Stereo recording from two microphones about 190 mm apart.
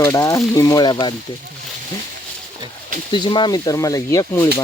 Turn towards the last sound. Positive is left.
turn(degrees=15)  # may be behind; listen again after turning